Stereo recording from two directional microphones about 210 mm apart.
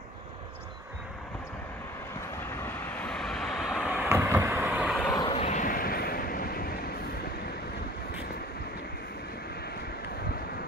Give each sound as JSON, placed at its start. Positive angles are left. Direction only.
{"t": 2.5, "sound": "vehicle", "side_deg": 10}
{"t": 5.1, "sound": "vehicle", "side_deg": 25}